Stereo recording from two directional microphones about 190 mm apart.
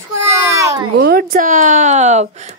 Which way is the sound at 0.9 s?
55° right (ahead or behind).